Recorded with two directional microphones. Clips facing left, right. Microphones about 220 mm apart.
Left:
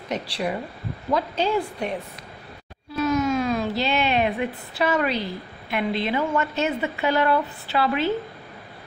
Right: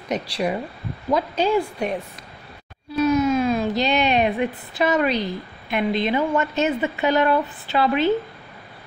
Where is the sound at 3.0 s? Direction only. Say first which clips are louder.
Right 3 dB; 20° right (ahead or behind).